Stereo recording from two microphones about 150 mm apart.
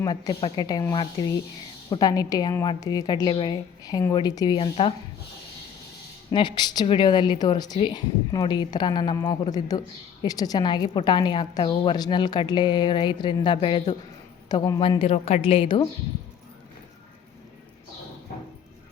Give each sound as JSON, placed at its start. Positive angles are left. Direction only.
{"t": 0.0, "sound": "a woman's voice", "side_deg": 25}
{"t": 4.5, "sound": "a woman's voice", "side_deg": 40}
{"t": 6.3, "sound": "a woman's voice", "side_deg": 30}
{"t": 14.5, "sound": "a woman's voice", "side_deg": 25}
{"t": 14.8, "sound": "a woman's voice", "side_deg": 35}